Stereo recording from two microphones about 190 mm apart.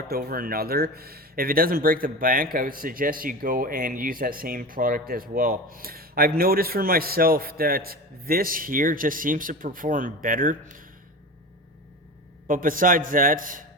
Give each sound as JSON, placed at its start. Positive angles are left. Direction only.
{"t": 0.1, "sound": "speech", "side_deg": -50}
{"t": 12.5, "sound": "speech", "side_deg": -45}